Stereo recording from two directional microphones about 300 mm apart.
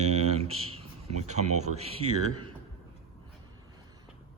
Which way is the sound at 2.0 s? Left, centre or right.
Right.